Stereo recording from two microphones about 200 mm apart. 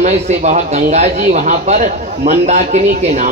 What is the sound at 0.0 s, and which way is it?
Speech, 35° right (ahead or behind).